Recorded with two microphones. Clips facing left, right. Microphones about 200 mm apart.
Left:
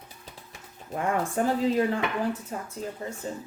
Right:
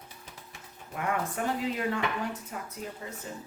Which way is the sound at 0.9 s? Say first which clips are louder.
Left 5 dB; 30° left (ahead or behind).